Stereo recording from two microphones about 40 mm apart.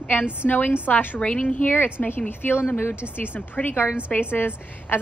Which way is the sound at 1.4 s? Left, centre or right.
Left.